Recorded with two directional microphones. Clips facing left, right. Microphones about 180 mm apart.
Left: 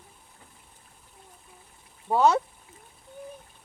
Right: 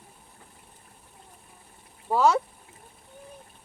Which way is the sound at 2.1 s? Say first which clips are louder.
Left 1 dB; 25° left (ahead or behind).